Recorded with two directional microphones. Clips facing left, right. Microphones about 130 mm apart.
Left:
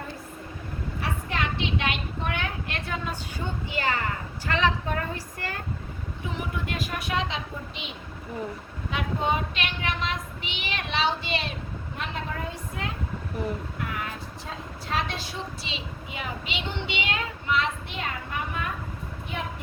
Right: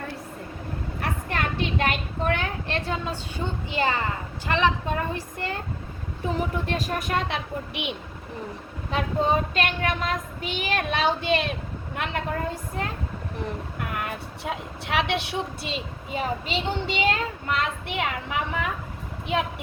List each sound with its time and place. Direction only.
1.0 s a woman's voice: 50° right (ahead or behind); by 5.5 s 20° right (ahead or behind)
6.3 s a woman's voice: 40° right (ahead or behind); by 7.9 s 70° right (ahead or behind)
8.9 s female singing: 35° right (ahead or behind)
9.6 s a woman's voice: 45° right (ahead or behind)
11.9 s a woman's voice: 65° right (ahead or behind)
12.8 s female singing: 40° right (ahead or behind)
13.7 s a woman's voice: 55° right (ahead or behind)
17.9 s a woman's voice: 85° right
19.3 s speech: 80° right